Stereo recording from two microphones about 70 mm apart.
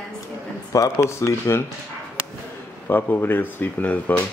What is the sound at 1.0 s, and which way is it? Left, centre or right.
Speech, left.